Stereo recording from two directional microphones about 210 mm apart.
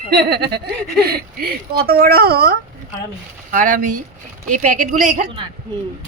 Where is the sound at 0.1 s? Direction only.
50° right (ahead or behind).